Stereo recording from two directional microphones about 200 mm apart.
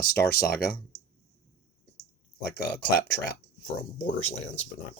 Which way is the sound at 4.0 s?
30° left (ahead or behind).